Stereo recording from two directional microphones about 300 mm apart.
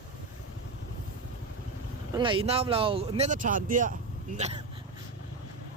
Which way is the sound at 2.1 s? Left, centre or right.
Centre.